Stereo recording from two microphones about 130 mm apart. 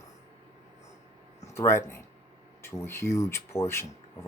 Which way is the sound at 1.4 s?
20° left (ahead or behind).